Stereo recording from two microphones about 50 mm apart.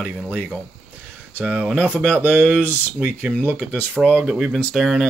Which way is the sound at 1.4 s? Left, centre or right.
Right.